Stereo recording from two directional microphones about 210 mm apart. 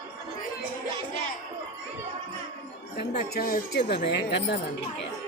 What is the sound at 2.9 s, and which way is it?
Speech, 50° left (ahead or behind).